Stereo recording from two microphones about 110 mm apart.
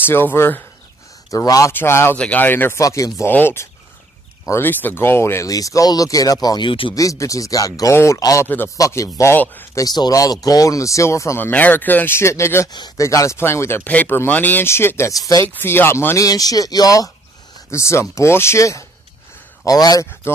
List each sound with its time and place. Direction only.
0.0 s speech: 20° left (ahead or behind)
1.3 s speech: 30° left (ahead or behind)
1.7 s speech: 20° left (ahead or behind)
2.8 s speech: 30° left (ahead or behind)
3.3 s speech: 20° left (ahead or behind); by 6.7 s 35° left (ahead or behind)
6.7 s speech: 55° left (ahead or behind)
7.0 s speech: 30° left (ahead or behind)
9.8 s speech: 40° left (ahead or behind)
12.7 s speech: 35° left (ahead or behind)
15.4 s speech: 20° left (ahead or behind)
16.2 s speech: 35° left (ahead or behind)